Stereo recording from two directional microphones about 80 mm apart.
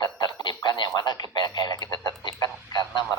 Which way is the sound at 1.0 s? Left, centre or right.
Left.